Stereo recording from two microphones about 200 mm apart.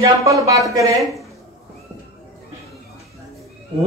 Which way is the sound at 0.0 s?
15° right (ahead or behind).